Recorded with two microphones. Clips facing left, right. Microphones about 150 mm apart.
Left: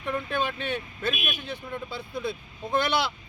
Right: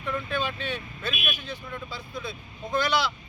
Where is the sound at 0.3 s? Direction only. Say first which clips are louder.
Left 2 dB; 55° left (ahead or behind).